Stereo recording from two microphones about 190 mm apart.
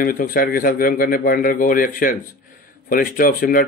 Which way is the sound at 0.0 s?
50° left (ahead or behind).